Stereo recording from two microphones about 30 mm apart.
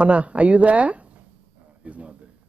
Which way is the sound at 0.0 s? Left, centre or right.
Right.